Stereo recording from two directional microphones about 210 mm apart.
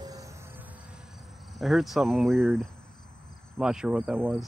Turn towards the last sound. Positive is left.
turn(degrees=0)  # may be behind; listen again after turning